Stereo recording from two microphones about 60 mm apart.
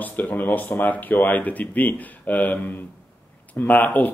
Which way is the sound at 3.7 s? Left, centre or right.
Left.